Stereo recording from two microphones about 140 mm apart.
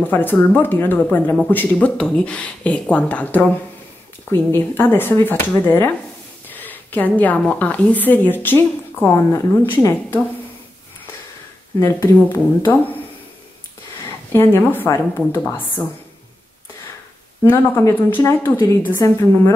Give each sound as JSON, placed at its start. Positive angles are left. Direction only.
{"t": 0.1, "sound": "speech", "side_deg": 15}
{"t": 11.8, "sound": "speech", "side_deg": 15}
{"t": 14.3, "sound": "speech", "side_deg": 15}
{"t": 17.4, "sound": "a woman's voice", "side_deg": 20}